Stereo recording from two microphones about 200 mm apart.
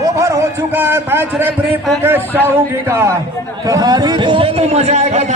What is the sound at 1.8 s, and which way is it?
Speech, centre (ahead or behind).